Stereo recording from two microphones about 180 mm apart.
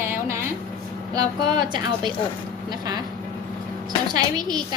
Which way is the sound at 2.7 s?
25° right (ahead or behind).